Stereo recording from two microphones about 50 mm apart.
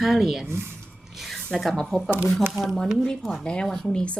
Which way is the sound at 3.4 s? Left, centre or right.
Left.